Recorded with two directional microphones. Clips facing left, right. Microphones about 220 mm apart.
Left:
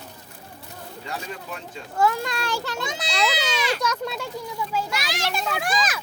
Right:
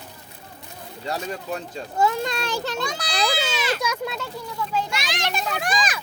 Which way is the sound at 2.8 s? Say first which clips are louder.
Right 1 dB; 20° left (ahead or behind).